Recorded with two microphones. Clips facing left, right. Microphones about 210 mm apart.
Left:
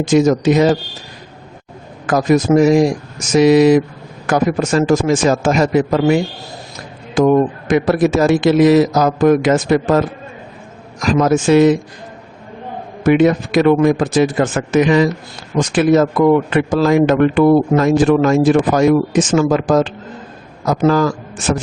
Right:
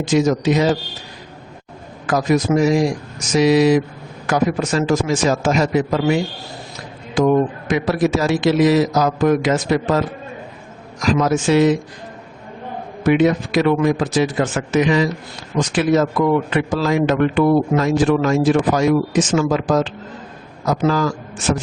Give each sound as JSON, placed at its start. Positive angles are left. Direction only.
{"t": 0.0, "sound": "speech", "side_deg": 50}
{"t": 2.0, "sound": "speech", "side_deg": 50}
{"t": 7.2, "sound": "speech", "side_deg": 50}
{"t": 11.0, "sound": "speech", "side_deg": 50}
{"t": 13.0, "sound": "speech", "side_deg": 50}